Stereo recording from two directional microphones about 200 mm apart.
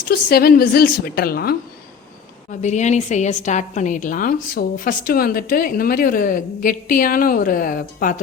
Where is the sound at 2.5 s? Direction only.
35° left (ahead or behind).